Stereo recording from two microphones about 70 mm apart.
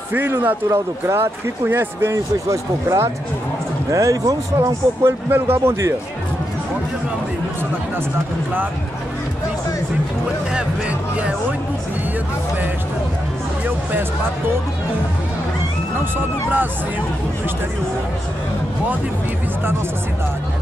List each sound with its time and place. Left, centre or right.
0.1 s a man's voice: right
0.7 s speech: right
2.1 s speech: right
5.0 s speech: right
16.2 s a man's voice: right